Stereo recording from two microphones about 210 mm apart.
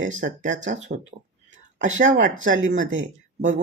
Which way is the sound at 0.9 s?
50° right (ahead or behind).